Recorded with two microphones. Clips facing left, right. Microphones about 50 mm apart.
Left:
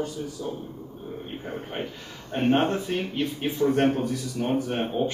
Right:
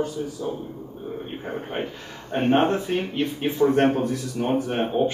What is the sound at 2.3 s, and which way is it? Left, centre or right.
A man's voice, centre.